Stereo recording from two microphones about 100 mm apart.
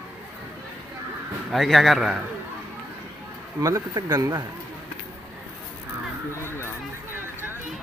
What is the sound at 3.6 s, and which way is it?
Speech, 40° right (ahead or behind).